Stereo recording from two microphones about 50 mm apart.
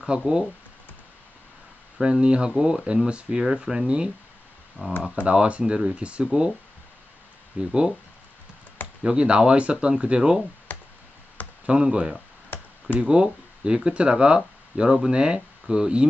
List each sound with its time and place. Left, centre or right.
0.0 s speech: centre
2.0 s speech: centre
7.5 s speech: centre
9.0 s speech: centre
10.7 s a sound: left
11.6 s speech: right